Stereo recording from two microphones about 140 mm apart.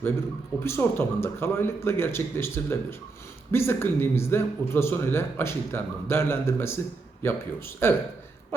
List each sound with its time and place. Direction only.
0.6 s speech: 15° left (ahead or behind)